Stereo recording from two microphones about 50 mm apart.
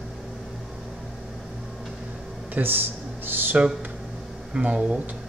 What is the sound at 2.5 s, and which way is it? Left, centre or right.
Speech, right.